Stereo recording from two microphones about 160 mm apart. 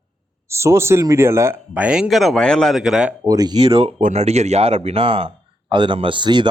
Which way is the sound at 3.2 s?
25° right (ahead or behind).